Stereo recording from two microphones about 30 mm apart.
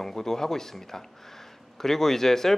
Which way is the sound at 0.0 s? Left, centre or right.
Centre.